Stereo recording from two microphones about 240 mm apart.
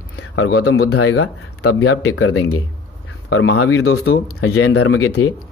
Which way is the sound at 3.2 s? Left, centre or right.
Left.